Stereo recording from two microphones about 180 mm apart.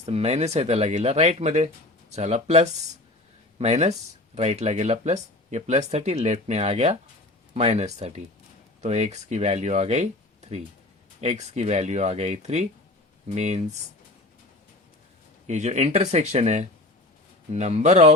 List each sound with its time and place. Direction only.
0.0 s speech: 35° right (ahead or behind)
11.2 s speech: 40° right (ahead or behind)
15.4 s speech: 40° right (ahead or behind)